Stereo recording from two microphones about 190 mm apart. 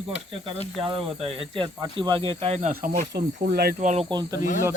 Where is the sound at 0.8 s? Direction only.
30° right (ahead or behind).